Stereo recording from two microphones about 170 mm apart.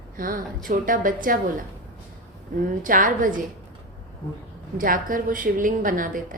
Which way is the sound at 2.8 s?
50° right (ahead or behind).